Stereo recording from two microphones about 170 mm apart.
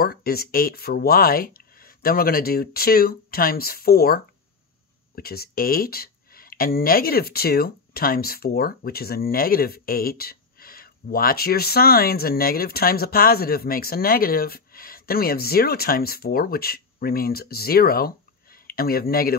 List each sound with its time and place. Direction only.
0.0 s speech: 65° left (ahead or behind)